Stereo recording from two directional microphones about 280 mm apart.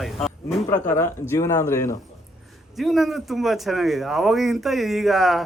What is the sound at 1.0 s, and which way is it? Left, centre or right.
Speech, centre.